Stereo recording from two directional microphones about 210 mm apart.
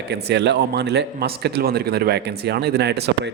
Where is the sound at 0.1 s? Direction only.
55° right (ahead or behind).